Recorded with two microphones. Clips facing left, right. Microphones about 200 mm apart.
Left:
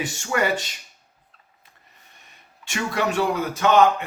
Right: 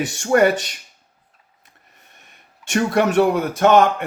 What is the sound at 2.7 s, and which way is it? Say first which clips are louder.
A man's voice: right 7 dB; 50° right (ahead or behind).